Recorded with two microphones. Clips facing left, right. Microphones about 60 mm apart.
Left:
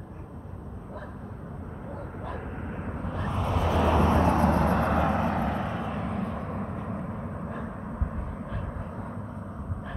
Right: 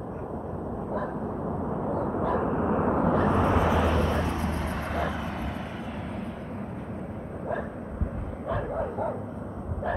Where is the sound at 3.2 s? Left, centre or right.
Right.